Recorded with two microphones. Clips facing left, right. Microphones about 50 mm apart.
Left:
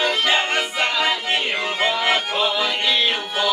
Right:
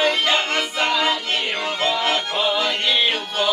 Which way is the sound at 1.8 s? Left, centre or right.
Centre.